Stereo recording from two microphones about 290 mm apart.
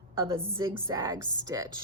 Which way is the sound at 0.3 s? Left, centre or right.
Centre.